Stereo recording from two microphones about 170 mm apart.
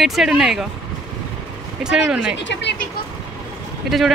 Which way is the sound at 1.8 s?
5° right (ahead or behind).